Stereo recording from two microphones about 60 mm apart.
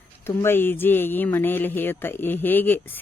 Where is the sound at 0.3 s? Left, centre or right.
Left.